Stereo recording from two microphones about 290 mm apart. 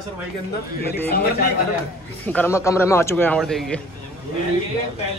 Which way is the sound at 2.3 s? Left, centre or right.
Centre.